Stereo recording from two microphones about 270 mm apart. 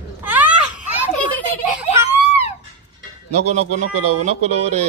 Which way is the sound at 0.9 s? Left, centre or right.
Centre.